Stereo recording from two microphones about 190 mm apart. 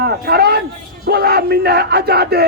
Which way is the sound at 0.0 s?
55° right (ahead or behind).